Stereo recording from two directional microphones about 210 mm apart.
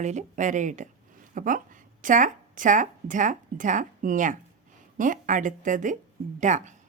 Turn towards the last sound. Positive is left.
turn(degrees=-35)  # may be behind; listen again after turning